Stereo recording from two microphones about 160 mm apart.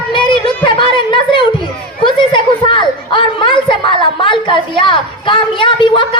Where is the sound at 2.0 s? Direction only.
30° left (ahead or behind).